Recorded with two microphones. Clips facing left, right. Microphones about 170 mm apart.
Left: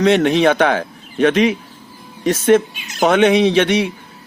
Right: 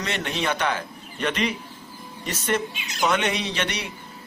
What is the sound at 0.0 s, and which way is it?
Speech, 75° left (ahead or behind).